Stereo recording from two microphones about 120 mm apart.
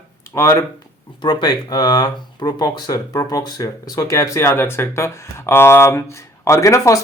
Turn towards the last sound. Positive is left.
turn(degrees=25)  # may be behind; listen again after turning